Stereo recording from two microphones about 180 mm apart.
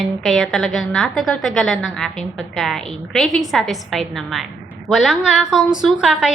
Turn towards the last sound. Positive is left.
turn(degrees=-5)  # may be behind; listen again after turning